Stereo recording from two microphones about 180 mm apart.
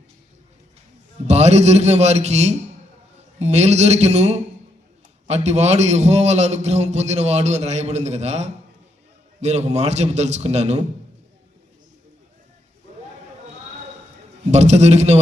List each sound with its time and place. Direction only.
1.3 s a man's voice: 35° right (ahead or behind)
14.5 s a man's voice: 40° right (ahead or behind)